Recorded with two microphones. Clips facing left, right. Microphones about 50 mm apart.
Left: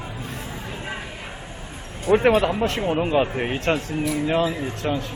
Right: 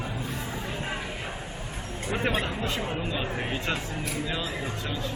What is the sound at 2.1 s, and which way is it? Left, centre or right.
Speech, left.